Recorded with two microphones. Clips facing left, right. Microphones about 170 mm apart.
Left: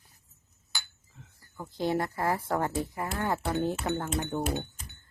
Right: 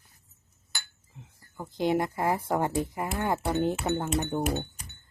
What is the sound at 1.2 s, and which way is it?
Speech, 15° right (ahead or behind).